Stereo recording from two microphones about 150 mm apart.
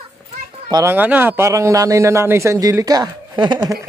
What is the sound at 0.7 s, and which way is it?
A man's voice, 15° right (ahead or behind).